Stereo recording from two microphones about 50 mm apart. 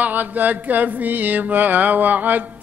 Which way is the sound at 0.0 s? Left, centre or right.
Right.